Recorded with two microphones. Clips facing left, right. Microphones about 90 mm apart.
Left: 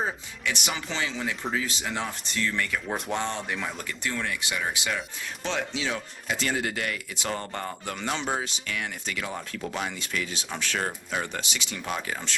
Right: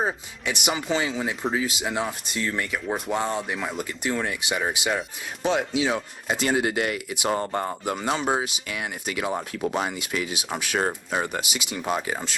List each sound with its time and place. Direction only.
0.0 s speech: 20° right (ahead or behind)
2.8 s speech: 5° right (ahead or behind)
3.8 s speech: 20° right (ahead or behind)
11.3 s speech: 15° right (ahead or behind)
11.9 s speech: 25° right (ahead or behind)